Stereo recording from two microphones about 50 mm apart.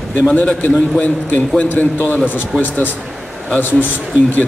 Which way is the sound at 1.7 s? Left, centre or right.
Left.